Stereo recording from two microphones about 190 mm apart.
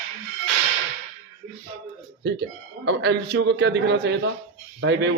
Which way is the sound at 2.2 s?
65° right (ahead or behind).